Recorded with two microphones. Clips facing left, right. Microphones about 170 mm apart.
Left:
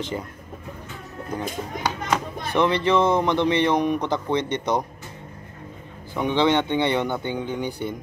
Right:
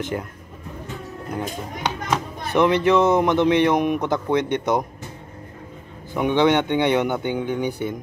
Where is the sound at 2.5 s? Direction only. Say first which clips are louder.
Right 3 dB; 15° right (ahead or behind).